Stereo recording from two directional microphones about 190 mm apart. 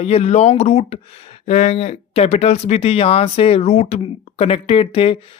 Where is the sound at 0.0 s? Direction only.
35° left (ahead or behind).